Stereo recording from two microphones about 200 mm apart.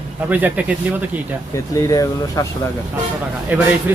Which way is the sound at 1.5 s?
15° left (ahead or behind).